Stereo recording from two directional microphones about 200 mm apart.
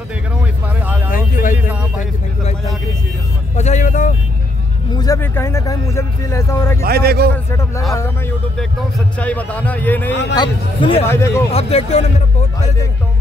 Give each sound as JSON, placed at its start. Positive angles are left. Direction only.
{"t": 1.5, "sound": "music", "side_deg": -10}
{"t": 2.0, "sound": "speech", "side_deg": 35}
{"t": 4.9, "sound": "speech", "side_deg": 15}
{"t": 6.8, "sound": "a man's voice", "side_deg": -50}
{"t": 8.5, "sound": "speech", "side_deg": 5}
{"t": 10.3, "sound": "speech", "side_deg": 25}
{"t": 11.1, "sound": "speech", "side_deg": 15}
{"t": 11.5, "sound": "speech", "side_deg": 30}